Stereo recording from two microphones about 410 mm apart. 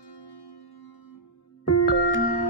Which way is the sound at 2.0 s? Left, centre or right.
Right.